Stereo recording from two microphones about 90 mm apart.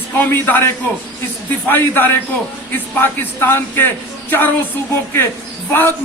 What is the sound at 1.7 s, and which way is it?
A man's voice, 20° left (ahead or behind).